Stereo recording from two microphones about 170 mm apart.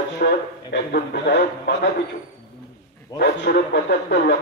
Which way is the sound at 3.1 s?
70° left (ahead or behind).